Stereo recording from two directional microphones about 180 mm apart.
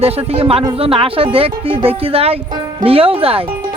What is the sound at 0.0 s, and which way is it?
Speech, 35° right (ahead or behind).